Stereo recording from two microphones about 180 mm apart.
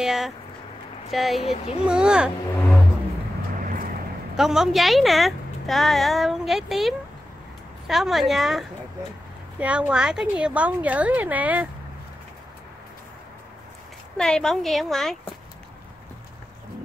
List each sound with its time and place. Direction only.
0.0 s speech: centre (ahead or behind)
1.4 s a child's voice: 35° left (ahead or behind)
1.9 s speech: 5° right (ahead or behind)
4.4 s a woman's voice: centre (ahead or behind)
14.1 s speech: 5° left (ahead or behind)